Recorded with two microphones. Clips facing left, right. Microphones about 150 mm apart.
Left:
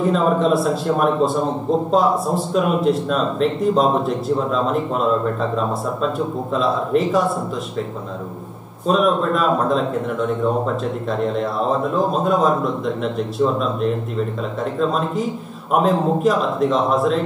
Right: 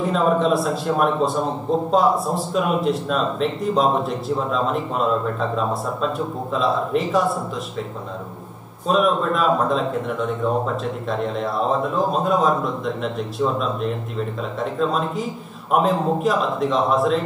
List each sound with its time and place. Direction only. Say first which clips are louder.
0.0 s a man's voice: left 2 dB; centre (ahead or behind)
8.8 s a man's voice: left 2 dB; centre (ahead or behind)